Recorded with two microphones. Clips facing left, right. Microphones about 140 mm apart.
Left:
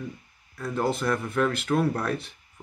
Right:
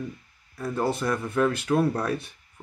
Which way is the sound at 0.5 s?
10° right (ahead or behind).